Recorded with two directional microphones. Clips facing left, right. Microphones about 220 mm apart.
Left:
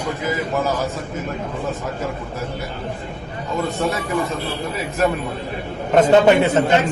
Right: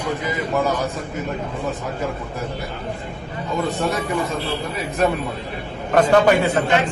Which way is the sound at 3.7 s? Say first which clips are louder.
Even; centre (ahead or behind).